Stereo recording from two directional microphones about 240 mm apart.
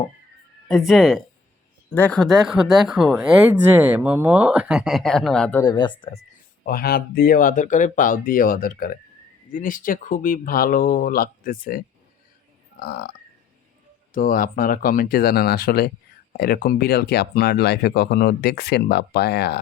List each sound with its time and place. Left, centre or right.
0.7 s speech: centre
6.7 s speech: left
14.1 s speech: left